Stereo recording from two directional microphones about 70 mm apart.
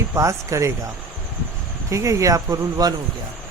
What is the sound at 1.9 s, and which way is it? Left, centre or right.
Speech, right.